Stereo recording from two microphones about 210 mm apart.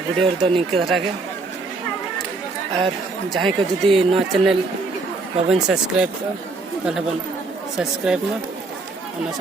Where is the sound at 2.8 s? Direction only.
Centre (ahead or behind).